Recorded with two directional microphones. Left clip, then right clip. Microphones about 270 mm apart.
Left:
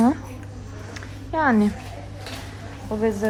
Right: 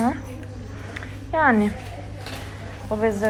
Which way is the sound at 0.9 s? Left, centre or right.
Centre.